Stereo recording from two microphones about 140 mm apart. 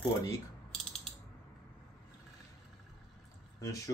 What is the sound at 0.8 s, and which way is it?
Mechanisms, 5° left (ahead or behind).